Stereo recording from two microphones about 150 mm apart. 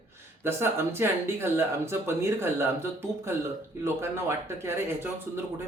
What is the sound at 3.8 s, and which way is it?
Speech, 15° right (ahead or behind).